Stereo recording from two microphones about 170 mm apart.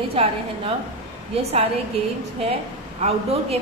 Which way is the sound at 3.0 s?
35° right (ahead or behind).